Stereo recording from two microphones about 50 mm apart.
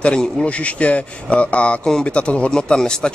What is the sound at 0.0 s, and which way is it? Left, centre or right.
A man's voice, centre.